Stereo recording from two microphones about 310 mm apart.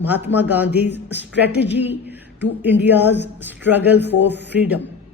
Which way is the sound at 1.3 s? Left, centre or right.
Left.